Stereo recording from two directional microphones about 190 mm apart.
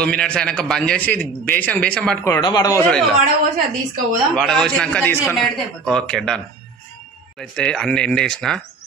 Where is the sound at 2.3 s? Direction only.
20° left (ahead or behind).